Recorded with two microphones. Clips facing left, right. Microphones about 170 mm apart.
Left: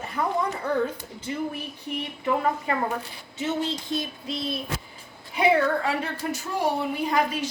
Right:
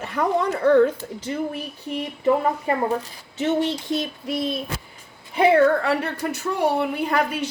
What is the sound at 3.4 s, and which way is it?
A woman's voice, 65° right (ahead or behind).